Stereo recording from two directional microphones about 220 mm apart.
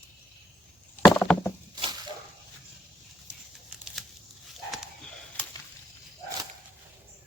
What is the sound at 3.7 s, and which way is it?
Tearing, centre (ahead or behind).